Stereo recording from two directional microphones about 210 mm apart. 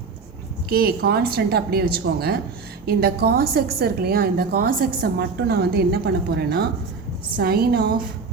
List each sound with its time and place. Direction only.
0.7 s a woman's voice: 45° right (ahead or behind)